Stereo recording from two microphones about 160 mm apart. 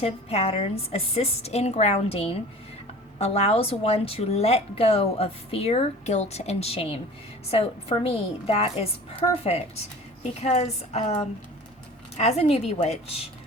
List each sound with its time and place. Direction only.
0.0 s a woman's voice: 40° left (ahead or behind)